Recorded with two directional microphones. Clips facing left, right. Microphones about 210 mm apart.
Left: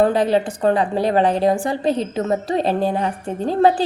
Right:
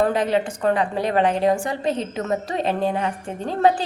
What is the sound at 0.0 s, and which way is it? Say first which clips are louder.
A woman's voice: left 4 dB; 35° left (ahead or behind).